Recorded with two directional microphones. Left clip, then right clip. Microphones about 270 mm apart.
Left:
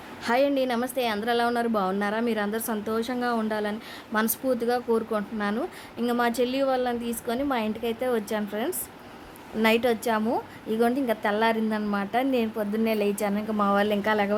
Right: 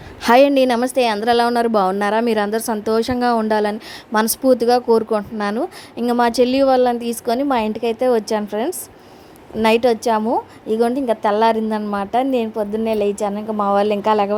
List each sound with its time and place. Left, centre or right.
0.2 s a woman's voice: right